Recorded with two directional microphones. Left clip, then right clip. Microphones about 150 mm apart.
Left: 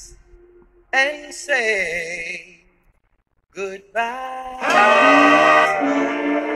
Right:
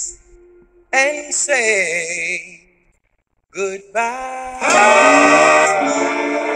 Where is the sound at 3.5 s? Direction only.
25° right (ahead or behind).